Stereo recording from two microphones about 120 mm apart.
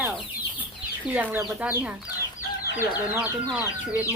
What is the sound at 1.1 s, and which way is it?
Speech, 10° right (ahead or behind).